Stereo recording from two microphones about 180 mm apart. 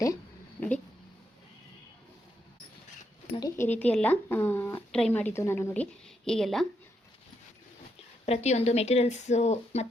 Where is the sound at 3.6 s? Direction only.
10° left (ahead or behind).